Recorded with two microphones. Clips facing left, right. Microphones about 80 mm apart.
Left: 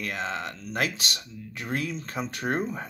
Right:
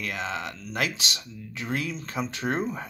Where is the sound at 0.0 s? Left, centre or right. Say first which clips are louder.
Even; left.